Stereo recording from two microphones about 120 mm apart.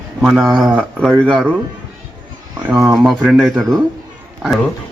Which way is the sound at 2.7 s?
25° right (ahead or behind).